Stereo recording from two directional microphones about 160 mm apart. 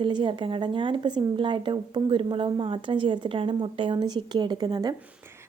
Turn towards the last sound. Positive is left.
turn(degrees=-25)  # may be behind; listen again after turning